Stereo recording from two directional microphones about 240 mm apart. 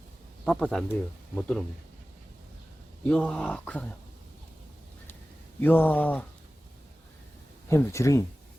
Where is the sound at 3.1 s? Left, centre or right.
Centre.